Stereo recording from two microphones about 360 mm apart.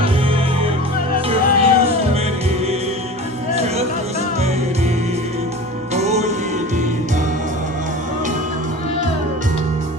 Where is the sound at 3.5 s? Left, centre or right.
Centre.